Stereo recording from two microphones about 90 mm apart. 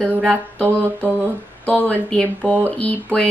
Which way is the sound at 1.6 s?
20° left (ahead or behind).